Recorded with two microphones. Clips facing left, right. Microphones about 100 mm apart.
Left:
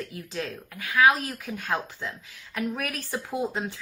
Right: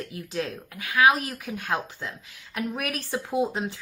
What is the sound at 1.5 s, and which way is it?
Speech, 10° right (ahead or behind).